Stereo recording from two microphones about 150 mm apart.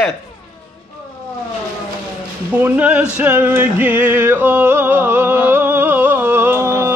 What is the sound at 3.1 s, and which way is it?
Music, 10° right (ahead or behind).